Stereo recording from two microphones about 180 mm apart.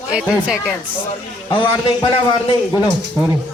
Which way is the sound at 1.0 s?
25° left (ahead or behind).